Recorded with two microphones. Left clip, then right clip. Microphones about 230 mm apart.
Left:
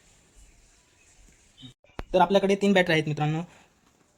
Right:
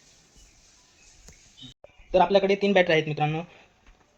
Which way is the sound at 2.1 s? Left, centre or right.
Left.